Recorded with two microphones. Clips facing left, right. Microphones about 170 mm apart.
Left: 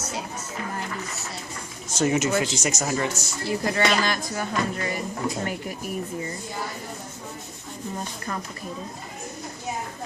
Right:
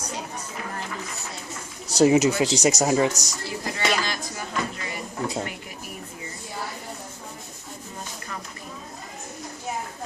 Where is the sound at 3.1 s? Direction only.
40° right (ahead or behind).